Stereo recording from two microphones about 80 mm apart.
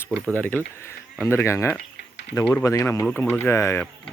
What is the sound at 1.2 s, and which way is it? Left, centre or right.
Speech, left.